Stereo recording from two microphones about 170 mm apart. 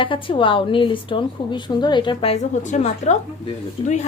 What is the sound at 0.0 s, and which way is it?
A woman's voice, 30° left (ahead or behind).